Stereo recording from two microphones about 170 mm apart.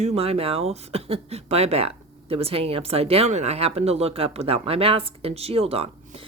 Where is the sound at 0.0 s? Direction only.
40° right (ahead or behind).